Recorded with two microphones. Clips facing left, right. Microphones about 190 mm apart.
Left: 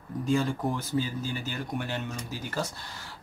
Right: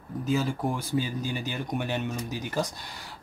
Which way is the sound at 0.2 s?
5° right (ahead or behind).